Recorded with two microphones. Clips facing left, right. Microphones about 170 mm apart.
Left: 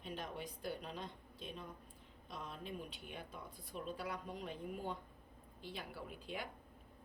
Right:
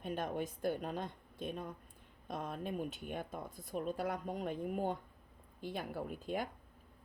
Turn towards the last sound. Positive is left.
turn(degrees=-45)  # may be behind; listen again after turning